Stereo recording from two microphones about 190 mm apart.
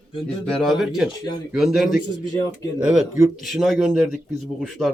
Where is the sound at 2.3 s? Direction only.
20° left (ahead or behind).